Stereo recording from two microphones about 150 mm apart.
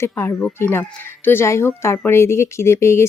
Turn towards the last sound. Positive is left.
turn(degrees=20)  # may be behind; listen again after turning